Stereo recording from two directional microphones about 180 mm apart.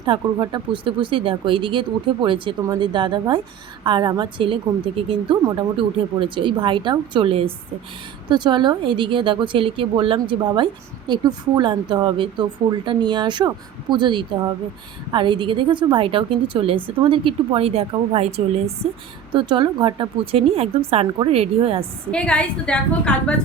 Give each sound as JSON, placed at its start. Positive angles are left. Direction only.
{"t": 0.0, "sound": "a woman's voice", "side_deg": -25}
{"t": 22.1, "sound": "a woman's voice", "side_deg": 5}